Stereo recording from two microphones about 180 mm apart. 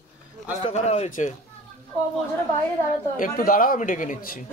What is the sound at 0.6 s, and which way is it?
Speech, 35° left (ahead or behind).